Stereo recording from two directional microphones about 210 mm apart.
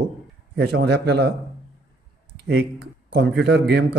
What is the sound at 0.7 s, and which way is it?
Speech, 55° right (ahead or behind).